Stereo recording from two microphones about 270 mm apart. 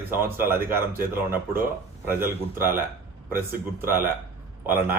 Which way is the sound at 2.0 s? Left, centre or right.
Centre.